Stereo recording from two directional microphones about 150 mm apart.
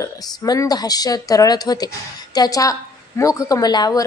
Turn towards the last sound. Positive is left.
turn(degrees=25)  # may be behind; listen again after turning